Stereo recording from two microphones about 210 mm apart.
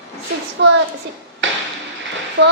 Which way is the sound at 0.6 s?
55° right (ahead or behind).